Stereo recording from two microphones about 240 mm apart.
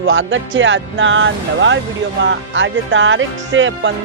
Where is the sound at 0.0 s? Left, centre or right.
Right.